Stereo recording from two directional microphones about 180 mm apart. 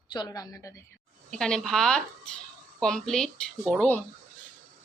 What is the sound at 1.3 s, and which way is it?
A woman's voice, 5° left (ahead or behind).